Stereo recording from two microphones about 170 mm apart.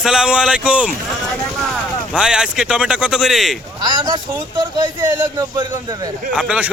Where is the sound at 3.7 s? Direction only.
25° right (ahead or behind).